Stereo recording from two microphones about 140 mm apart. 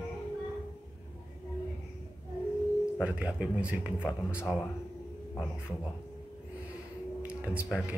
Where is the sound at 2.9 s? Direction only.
10° right (ahead or behind).